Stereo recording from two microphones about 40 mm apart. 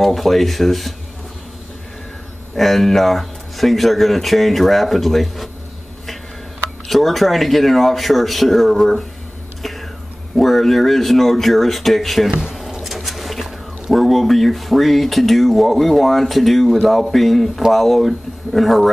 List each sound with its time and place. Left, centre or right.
0.0 s speech: centre
2.5 s speech: centre
6.9 s speech: centre
9.6 s whispering: centre
10.3 s speech: centre
12.3 s speech: centre
12.7 s a sound: centre
13.9 s speech: centre